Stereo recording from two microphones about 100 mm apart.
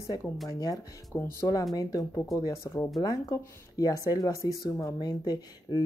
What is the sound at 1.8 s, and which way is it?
Speech, 35° left (ahead or behind).